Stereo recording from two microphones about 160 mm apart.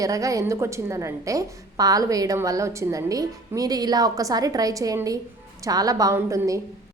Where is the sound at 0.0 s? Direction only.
20° right (ahead or behind).